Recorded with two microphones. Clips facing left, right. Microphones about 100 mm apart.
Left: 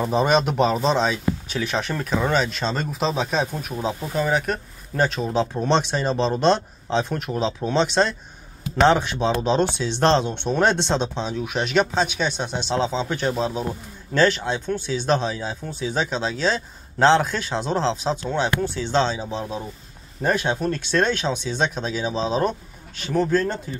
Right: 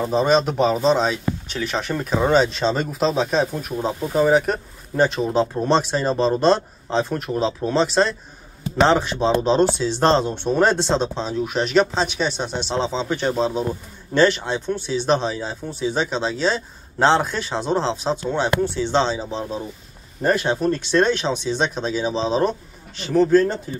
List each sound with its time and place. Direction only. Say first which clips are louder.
0.0 s speech: right 1 dB; 5° left (ahead or behind)
2.2 s speech: right 7 dB; 25° right (ahead or behind)
2.6 s speech: right 4 dB; 10° right (ahead or behind)
3.0 s speech: right 3 dB; centre (ahead or behind)
4.1 s speech: right 6 dB; 30° right (ahead or behind)
4.9 s speech: right 3 dB; 15° right (ahead or behind)
11.1 s speech: right 3 dB; 5° left (ahead or behind)